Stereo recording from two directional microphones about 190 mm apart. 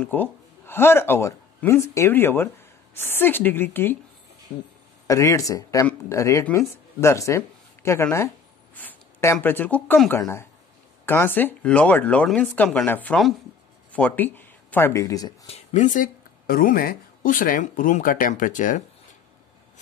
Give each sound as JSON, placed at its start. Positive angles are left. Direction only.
{"t": 0.0, "sound": "speech", "side_deg": 10}
{"t": 5.0, "sound": "speech", "side_deg": 15}
{"t": 15.4, "sound": "speech", "side_deg": 35}